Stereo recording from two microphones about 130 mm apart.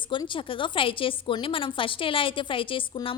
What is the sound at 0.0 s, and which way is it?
A woman's voice, 40° left (ahead or behind).